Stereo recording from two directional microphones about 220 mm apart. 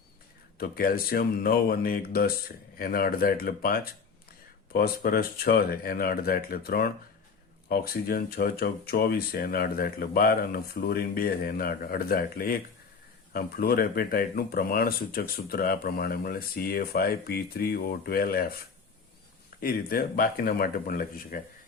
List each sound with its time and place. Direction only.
0.6 s speech: 40° left (ahead or behind)
19.5 s speech: 40° left (ahead or behind)